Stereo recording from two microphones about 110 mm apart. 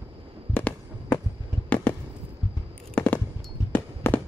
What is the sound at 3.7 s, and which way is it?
Fireworks, 15° left (ahead or behind).